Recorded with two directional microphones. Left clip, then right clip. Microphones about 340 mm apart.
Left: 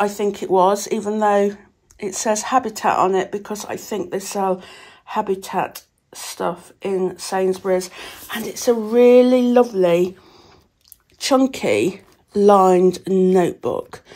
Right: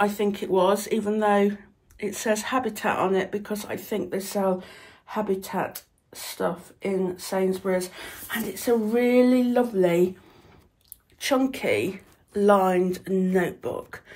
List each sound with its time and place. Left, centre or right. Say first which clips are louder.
0.0 s speech: left 4 dB; centre
11.1 s speech: left 7 dB; centre